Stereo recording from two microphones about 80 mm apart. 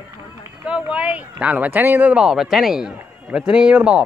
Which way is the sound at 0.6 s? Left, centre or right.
Centre.